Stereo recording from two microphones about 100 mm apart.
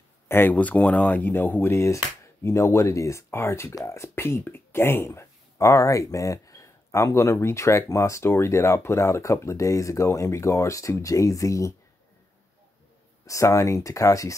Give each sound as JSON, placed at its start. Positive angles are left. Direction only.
{"t": 0.3, "sound": "speech", "side_deg": 20}
{"t": 13.3, "sound": "speech", "side_deg": 30}